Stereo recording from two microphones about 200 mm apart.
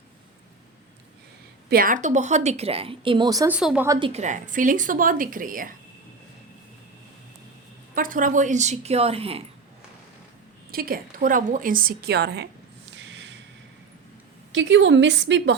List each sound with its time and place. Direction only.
1.7 s a woman's voice: 45° right (ahead or behind); by 3.5 s 20° right (ahead or behind)
3.5 s a woman's voice: 5° right (ahead or behind)
4.1 s a woman's voice: 35° right (ahead or behind)
7.9 s a woman's voice: 40° right (ahead or behind)
10.7 s a woman's voice: 45° right (ahead or behind)
13.0 s snort: 65° right (ahead or behind)
14.5 s a woman's voice: 65° right (ahead or behind)